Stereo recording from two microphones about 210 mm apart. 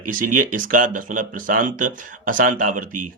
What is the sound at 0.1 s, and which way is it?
Speech, 40° right (ahead or behind).